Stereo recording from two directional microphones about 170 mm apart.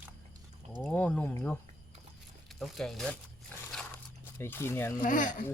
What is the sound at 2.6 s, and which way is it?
Speech, centre (ahead or behind).